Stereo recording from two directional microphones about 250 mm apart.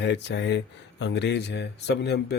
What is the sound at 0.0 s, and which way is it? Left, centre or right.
Speech, left.